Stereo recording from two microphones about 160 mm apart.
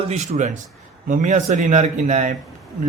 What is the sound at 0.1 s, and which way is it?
A man's voice, 45° right (ahead or behind).